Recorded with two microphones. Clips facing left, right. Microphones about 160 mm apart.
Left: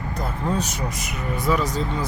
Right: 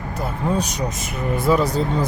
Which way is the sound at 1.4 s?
30° right (ahead or behind).